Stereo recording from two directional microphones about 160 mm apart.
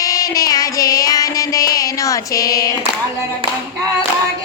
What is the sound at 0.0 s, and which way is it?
Child singing, 20° left (ahead or behind).